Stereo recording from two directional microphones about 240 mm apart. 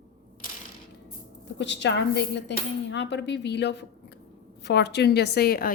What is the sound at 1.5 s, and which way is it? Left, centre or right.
A woman's voice, left.